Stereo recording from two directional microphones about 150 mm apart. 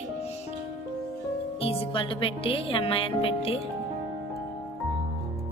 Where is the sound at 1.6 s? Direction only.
35° left (ahead or behind).